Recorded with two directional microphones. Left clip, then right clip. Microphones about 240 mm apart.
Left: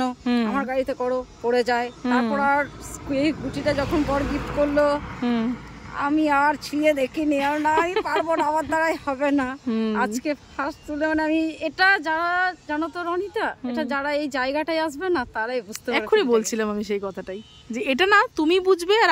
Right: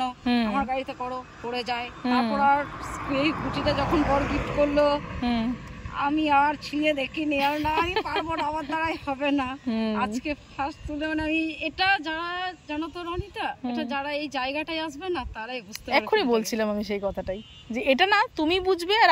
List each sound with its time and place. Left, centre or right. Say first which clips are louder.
0.2 s speech: left 1 dB; centre
4.3 s a woman's voice: left 1 dB; centre
4.7 s a sound: left 3 dB; left
5.2 s speech: left 2 dB; centre